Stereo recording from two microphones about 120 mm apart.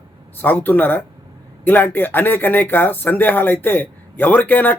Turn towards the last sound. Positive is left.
turn(degrees=15)  # may be behind; listen again after turning